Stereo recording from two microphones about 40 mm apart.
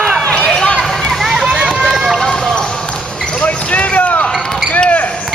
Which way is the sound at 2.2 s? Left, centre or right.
Centre.